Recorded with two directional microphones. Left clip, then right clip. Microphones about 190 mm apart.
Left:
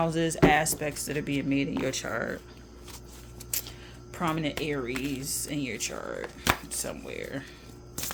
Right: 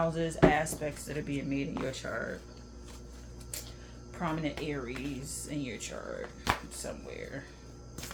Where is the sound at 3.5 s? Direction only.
55° left (ahead or behind).